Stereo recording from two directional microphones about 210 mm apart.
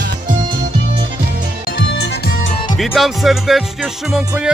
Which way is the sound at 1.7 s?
60° left (ahead or behind).